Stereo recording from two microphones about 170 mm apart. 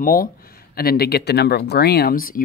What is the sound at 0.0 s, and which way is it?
Speech, 55° left (ahead or behind).